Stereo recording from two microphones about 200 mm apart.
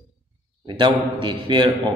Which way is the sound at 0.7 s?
25° right (ahead or behind).